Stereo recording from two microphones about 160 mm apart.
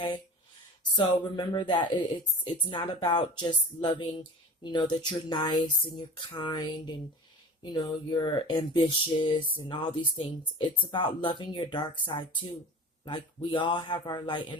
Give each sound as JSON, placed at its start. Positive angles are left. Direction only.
{"t": 0.9, "sound": "speech", "side_deg": 30}